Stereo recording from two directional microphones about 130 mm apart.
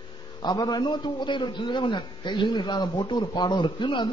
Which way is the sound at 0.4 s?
30° left (ahead or behind).